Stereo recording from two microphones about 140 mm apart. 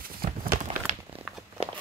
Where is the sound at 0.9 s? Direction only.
55° right (ahead or behind).